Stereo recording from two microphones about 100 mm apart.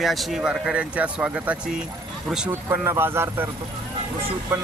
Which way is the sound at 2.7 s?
20° right (ahead or behind).